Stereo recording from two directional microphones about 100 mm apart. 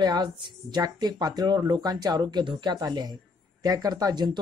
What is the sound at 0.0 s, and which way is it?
A man's voice, 45° right (ahead or behind).